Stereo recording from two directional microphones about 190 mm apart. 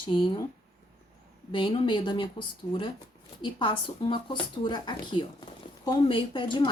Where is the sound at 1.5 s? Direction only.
25° left (ahead or behind).